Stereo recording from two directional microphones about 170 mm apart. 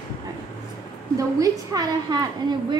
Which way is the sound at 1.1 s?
20° right (ahead or behind).